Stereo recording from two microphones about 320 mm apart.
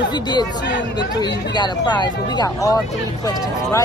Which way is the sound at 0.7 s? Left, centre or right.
Left.